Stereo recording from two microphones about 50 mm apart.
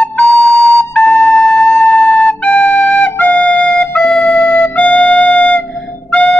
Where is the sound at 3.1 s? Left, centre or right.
Left.